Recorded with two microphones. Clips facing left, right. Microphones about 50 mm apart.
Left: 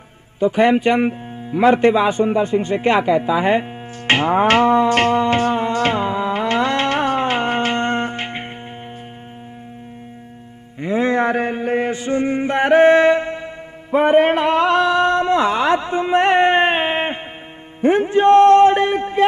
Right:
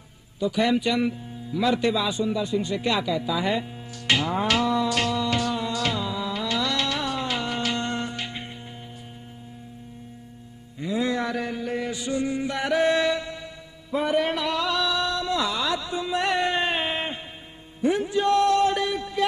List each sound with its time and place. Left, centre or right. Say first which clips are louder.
0.4 s speech: left 8 dB; left
4.1 s music: left 9 dB; left
10.8 s mantra: left 8 dB; left
13.9 s speech: left 10 dB; left